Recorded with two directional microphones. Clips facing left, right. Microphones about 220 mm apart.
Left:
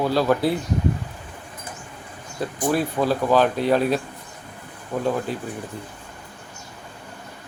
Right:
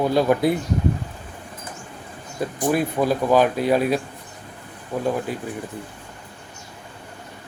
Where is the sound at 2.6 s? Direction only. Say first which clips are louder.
Right 1 dB; 15° right (ahead or behind).